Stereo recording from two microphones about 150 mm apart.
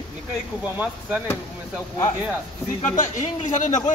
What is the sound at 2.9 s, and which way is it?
Speech, 55° left (ahead or behind).